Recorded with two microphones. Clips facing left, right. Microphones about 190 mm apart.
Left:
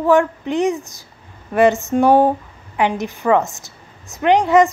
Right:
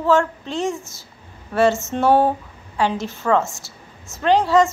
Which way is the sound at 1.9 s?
15° left (ahead or behind).